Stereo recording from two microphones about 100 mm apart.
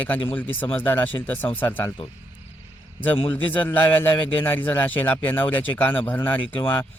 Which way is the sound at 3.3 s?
20° left (ahead or behind).